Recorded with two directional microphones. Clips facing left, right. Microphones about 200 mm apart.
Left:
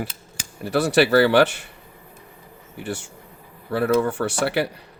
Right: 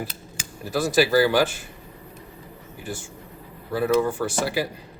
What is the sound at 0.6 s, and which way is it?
Speech, 70° left (ahead or behind).